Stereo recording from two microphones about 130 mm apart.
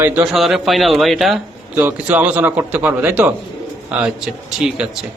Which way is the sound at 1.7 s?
15° right (ahead or behind).